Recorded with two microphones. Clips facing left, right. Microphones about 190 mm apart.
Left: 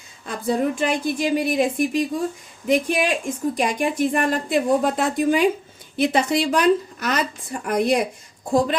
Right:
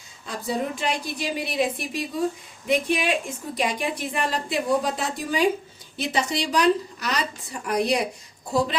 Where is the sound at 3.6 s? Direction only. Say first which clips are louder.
Left 3 dB; 50° left (ahead or behind).